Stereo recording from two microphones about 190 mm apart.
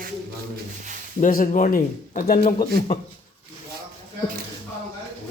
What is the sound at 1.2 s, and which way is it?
Speech, 45° left (ahead or behind).